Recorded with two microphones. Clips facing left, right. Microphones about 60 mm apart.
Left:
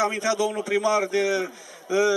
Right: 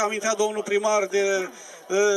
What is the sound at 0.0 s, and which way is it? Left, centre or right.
A man's voice, centre.